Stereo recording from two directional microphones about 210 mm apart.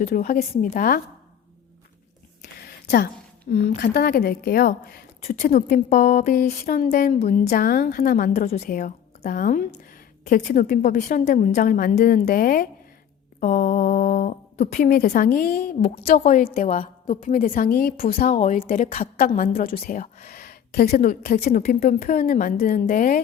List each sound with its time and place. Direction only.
0.0 s speech: 45° left (ahead or behind)
2.6 s a sound: 45° left (ahead or behind)
3.5 s speech: 45° left (ahead or behind)
5.2 s a woman's voice: 35° left (ahead or behind)